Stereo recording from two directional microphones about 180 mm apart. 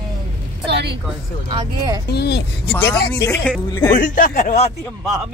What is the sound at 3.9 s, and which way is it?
Speech, 50° left (ahead or behind).